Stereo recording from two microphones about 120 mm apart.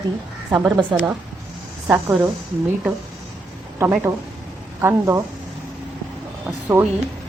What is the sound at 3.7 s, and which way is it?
Speech, 20° right (ahead or behind).